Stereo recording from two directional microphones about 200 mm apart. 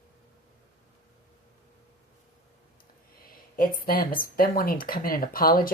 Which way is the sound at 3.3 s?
45° left (ahead or behind).